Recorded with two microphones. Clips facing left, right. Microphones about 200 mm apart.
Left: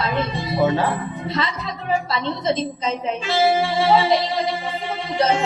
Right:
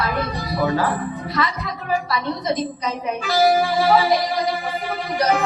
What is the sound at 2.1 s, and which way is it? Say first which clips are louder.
Saxophone: left 1 dB; 25° left (ahead or behind).